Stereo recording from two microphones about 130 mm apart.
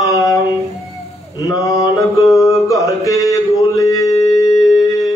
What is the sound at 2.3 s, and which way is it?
Mantra, 25° left (ahead or behind).